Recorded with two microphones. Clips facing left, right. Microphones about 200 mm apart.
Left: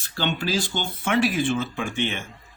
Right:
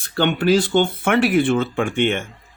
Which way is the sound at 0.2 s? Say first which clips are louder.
Right 9 dB; 60° right (ahead or behind).